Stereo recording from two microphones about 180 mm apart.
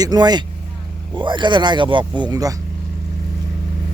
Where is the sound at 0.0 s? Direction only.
20° right (ahead or behind).